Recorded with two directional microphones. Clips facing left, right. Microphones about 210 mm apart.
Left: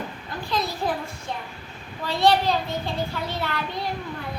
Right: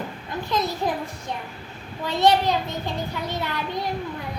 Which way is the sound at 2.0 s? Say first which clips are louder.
Right 1 dB; 20° right (ahead or behind).